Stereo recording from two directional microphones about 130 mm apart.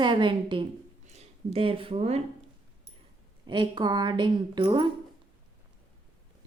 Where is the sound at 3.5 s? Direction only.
35° right (ahead or behind).